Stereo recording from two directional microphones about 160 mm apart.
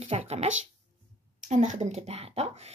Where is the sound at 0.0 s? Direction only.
40° right (ahead or behind).